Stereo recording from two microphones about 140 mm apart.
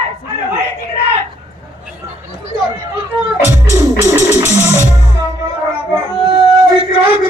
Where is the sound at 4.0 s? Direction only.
15° right (ahead or behind).